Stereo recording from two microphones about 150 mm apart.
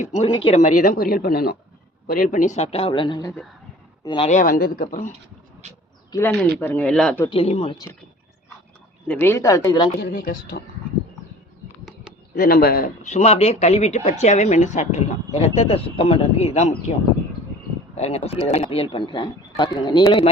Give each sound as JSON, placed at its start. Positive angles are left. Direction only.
{"t": 0.0, "sound": "speech", "side_deg": 50}
{"t": 2.0, "sound": "speech", "side_deg": 65}
{"t": 4.3, "sound": "speech", "side_deg": 65}
{"t": 6.6, "sound": "speech", "side_deg": 15}
{"t": 7.3, "sound": "speech", "side_deg": 40}
{"t": 9.0, "sound": "speech", "side_deg": 15}
{"t": 10.0, "sound": "a woman's voice", "side_deg": 90}
{"t": 12.3, "sound": "speech", "side_deg": 90}
{"t": 13.0, "sound": "speech", "side_deg": 50}
{"t": 17.9, "sound": "speech", "side_deg": 45}